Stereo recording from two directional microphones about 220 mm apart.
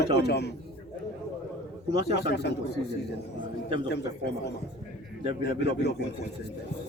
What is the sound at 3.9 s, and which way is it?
Speech, 50° left (ahead or behind).